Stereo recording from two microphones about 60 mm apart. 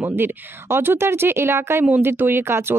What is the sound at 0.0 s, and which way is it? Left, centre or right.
Speech, right.